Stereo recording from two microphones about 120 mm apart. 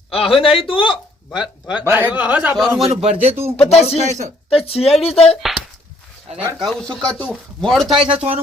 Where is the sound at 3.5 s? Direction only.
60° left (ahead or behind).